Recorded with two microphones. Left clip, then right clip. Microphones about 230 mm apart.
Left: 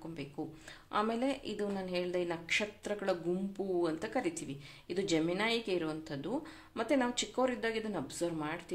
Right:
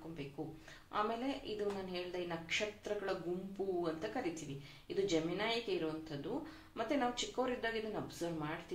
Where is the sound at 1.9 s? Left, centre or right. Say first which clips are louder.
Left 7 dB; left.